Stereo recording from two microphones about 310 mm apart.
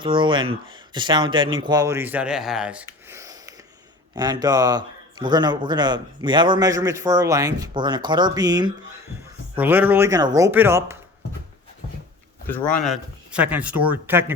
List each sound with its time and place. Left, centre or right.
0.0 s a man's voice: centre
12.5 s speech: centre